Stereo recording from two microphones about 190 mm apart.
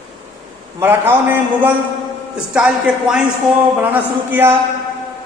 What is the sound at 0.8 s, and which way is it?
A woman's voice, 10° right (ahead or behind).